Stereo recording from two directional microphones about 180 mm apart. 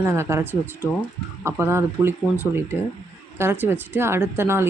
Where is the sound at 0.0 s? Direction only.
15° right (ahead or behind).